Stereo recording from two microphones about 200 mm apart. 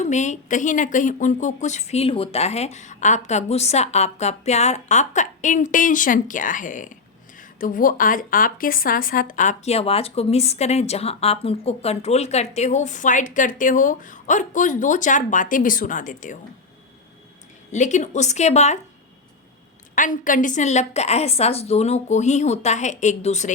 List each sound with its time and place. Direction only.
0.0 s a woman's voice: 35° left (ahead or behind)
17.7 s a woman's voice: 35° left (ahead or behind)
20.0 s a woman's voice: 40° left (ahead or behind)